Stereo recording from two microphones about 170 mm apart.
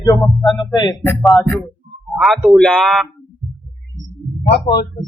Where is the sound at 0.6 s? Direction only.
25° left (ahead or behind).